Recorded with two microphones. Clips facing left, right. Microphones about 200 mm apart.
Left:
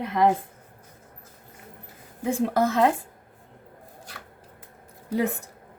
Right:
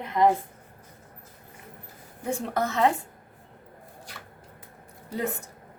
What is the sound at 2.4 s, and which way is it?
Speech, 55° left (ahead or behind).